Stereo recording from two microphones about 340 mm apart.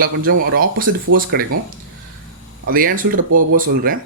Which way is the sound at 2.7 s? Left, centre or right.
Right.